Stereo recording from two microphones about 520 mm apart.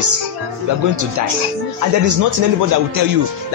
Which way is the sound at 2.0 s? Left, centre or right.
Right.